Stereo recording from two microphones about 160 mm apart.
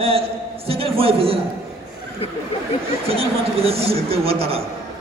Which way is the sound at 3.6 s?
35° right (ahead or behind).